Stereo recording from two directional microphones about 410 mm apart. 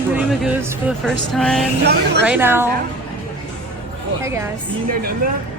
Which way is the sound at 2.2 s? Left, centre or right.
Centre.